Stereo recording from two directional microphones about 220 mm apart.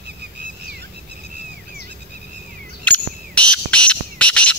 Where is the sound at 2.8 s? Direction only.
5° left (ahead or behind).